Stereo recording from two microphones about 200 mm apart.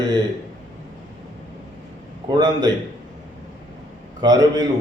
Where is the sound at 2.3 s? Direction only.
20° right (ahead or behind).